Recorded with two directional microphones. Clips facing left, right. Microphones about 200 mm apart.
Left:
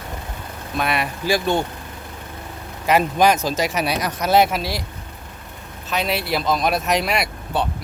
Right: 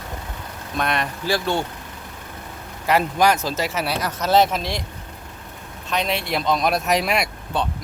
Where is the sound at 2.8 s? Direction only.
20° left (ahead or behind).